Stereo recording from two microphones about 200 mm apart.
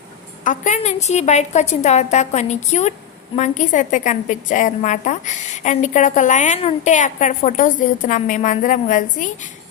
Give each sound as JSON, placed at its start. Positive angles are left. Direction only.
{"t": 0.4, "sound": "a woman's voice", "side_deg": 35}